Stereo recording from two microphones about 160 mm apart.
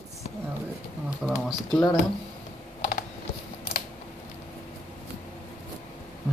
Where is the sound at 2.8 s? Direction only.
55° left (ahead or behind).